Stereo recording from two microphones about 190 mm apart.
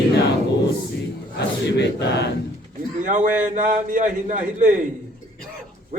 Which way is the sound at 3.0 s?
45° right (ahead or behind).